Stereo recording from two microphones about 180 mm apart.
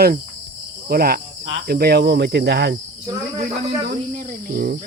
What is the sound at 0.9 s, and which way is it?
Cricket, 55° right (ahead or behind).